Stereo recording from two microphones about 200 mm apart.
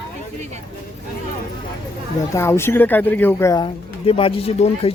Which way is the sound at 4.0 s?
25° left (ahead or behind).